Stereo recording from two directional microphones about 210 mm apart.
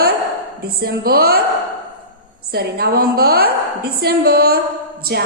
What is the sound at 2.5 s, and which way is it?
A woman's voice, 45° right (ahead or behind).